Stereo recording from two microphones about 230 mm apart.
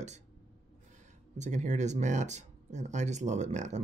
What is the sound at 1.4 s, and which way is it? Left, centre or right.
Speech, right.